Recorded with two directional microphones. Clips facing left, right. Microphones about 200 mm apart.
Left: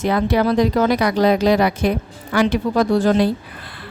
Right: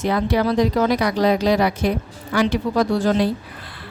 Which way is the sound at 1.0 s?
60° left (ahead or behind).